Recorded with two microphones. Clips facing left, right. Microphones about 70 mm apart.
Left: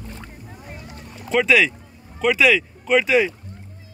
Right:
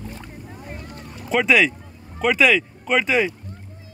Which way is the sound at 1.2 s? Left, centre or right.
Centre.